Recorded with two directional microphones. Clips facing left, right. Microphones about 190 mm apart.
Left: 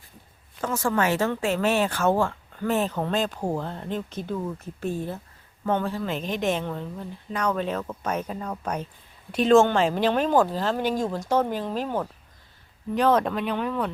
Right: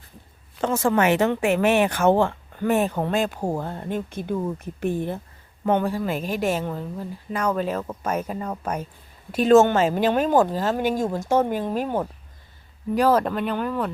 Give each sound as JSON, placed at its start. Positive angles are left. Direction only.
{"t": 0.6, "sound": "speech", "side_deg": -25}
{"t": 10.3, "sound": "speech", "side_deg": -20}
{"t": 10.6, "sound": "speech", "side_deg": -10}